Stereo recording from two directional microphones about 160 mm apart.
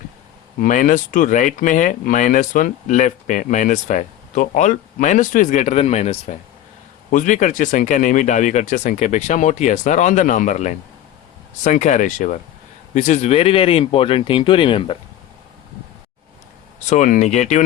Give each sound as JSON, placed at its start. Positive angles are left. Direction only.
{"t": 0.6, "sound": "speech", "side_deg": 55}
{"t": 16.9, "sound": "speech", "side_deg": 50}